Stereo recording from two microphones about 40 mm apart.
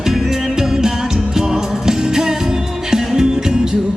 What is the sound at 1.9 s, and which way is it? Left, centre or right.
Music, centre.